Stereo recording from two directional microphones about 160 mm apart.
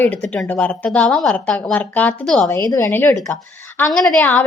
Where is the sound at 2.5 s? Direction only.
15° left (ahead or behind).